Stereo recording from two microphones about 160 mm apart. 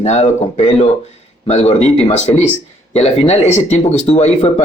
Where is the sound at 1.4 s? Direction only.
40° left (ahead or behind).